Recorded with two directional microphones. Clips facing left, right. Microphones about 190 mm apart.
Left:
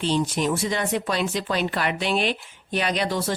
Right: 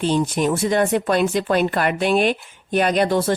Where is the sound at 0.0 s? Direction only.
50° right (ahead or behind).